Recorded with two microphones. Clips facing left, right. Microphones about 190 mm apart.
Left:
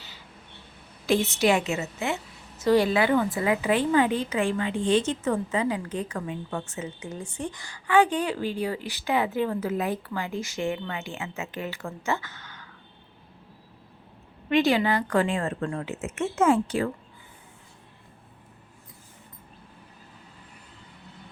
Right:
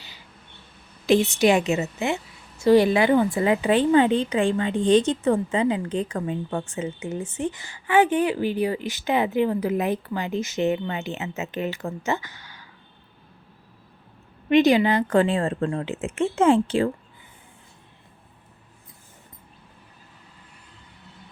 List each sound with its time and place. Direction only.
1.0 s a woman's voice: 15° right (ahead or behind)
14.5 s a woman's voice: 20° right (ahead or behind)
15.1 s speech: 30° right (ahead or behind)